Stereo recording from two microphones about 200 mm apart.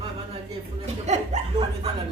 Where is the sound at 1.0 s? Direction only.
35° right (ahead or behind).